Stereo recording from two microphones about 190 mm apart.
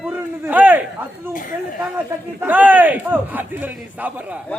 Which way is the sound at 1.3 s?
45° left (ahead or behind).